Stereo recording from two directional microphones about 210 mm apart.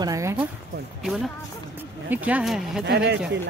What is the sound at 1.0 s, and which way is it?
Speech, centre (ahead or behind).